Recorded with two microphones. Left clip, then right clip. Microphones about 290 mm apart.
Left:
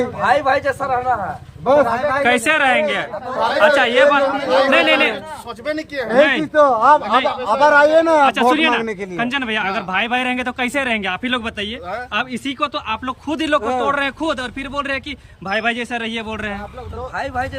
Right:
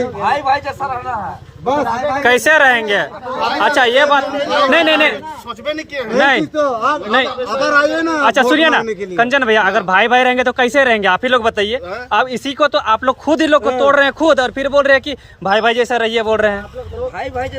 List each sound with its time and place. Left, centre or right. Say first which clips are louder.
0.3 s speech: even; centre
2.2 s speech: right 7 dB; centre
4.3 s speech: even; centre
4.7 s speech: right 4 dB; centre
5.6 s speech: right 1 dB; centre
8.3 s speech: right 4 dB; centre